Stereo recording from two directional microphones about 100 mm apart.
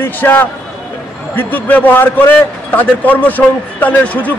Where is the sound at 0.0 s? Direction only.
20° left (ahead or behind).